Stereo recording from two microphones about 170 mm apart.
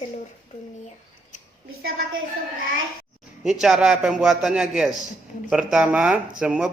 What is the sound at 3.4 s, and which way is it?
A man's voice, centre (ahead or behind).